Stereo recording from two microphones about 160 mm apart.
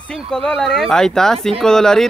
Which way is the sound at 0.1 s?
5° left (ahead or behind).